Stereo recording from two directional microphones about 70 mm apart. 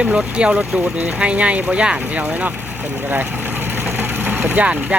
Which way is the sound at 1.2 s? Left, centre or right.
Centre.